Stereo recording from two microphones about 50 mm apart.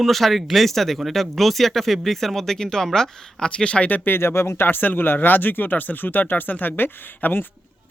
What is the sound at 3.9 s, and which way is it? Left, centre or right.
Speech, left.